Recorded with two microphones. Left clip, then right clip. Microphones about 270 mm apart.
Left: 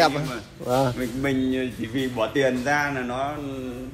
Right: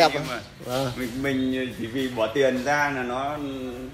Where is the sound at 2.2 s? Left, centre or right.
Left.